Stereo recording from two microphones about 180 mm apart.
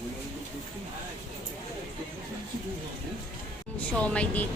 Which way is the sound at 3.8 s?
5° left (ahead or behind).